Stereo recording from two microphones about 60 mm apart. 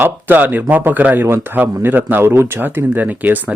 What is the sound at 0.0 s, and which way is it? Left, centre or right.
A man's voice, right.